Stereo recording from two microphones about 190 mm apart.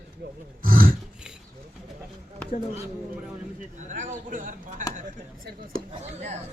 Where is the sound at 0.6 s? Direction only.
50° right (ahead or behind).